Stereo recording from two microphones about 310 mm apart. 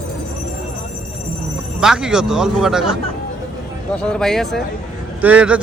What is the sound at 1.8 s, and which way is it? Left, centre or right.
A man's voice, centre.